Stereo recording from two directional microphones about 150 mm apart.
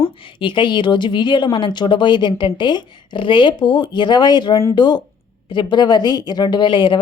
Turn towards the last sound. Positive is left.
turn(degrees=30)  # may be behind; listen again after turning